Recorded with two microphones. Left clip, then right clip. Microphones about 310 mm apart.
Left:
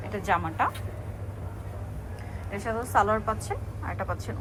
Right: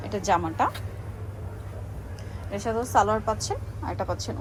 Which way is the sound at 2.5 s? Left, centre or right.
Centre.